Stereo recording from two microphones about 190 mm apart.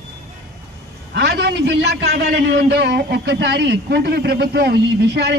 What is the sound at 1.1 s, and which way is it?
A man's voice, 60° right (ahead or behind).